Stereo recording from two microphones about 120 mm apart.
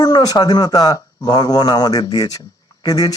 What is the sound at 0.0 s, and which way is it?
Speech, 35° left (ahead or behind).